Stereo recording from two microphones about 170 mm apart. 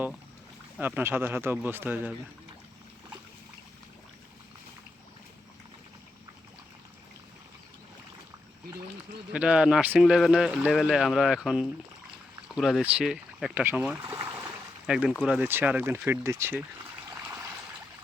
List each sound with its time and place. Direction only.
0.8 s speech: 10° right (ahead or behind)
9.3 s speech: 5° right (ahead or behind)
14.1 s a sound: 15° right (ahead or behind)
14.8 s speech: 5° right (ahead or behind)